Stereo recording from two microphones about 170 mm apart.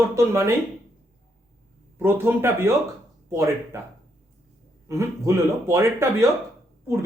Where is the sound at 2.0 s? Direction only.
15° right (ahead or behind).